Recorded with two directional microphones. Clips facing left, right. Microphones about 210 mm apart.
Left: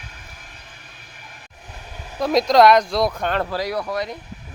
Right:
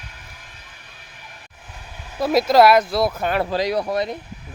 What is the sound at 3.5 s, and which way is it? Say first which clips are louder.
Speech: right 3 dB; 20° right (ahead or behind).